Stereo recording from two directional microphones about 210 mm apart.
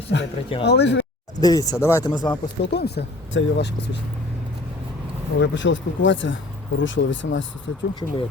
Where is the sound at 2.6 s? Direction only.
50° left (ahead or behind).